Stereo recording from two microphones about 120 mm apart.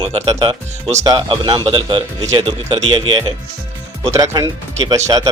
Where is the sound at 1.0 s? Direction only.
30° right (ahead or behind).